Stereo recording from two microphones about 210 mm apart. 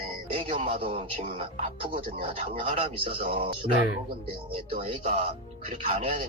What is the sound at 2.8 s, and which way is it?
Speech, 25° right (ahead or behind).